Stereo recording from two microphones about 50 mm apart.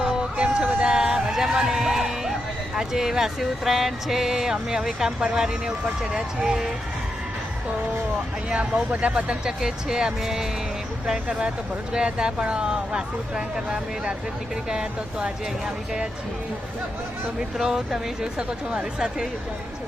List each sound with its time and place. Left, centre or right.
0.3 s a sound: right; by 2.3 s centre
2.7 s speech: centre
8.4 s speech: right
17.6 s speech: centre
18.3 s speech: right